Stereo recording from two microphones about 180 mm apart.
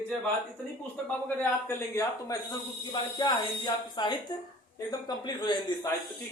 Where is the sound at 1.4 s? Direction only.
15° left (ahead or behind).